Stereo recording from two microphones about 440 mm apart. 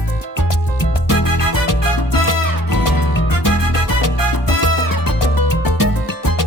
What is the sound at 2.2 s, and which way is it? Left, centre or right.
Music, left.